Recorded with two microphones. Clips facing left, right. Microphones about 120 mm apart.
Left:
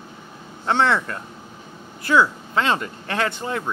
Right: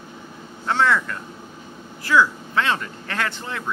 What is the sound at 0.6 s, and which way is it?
Speech, 25° left (ahead or behind).